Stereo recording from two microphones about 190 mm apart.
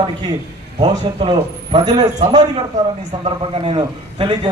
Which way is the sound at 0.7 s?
25° right (ahead or behind).